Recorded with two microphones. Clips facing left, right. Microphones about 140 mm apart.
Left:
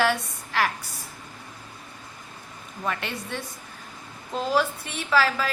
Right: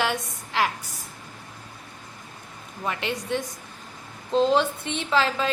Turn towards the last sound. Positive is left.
turn(degrees=-25)  # may be behind; listen again after turning